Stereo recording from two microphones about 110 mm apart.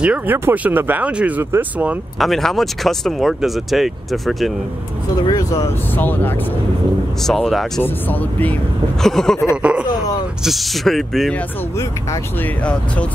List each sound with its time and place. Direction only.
0.0 s speech: 10° right (ahead or behind)
2.1 s speech: centre (ahead or behind)
5.3 s speech: 30° left (ahead or behind)
5.9 s speech: 15° left (ahead or behind)
7.2 s speech: centre (ahead or behind)
7.8 s speech: 15° left (ahead or behind)
9.0 s speech: 5° left (ahead or behind)
9.6 s speech: 10° right (ahead or behind)
10.4 s speech: centre (ahead or behind)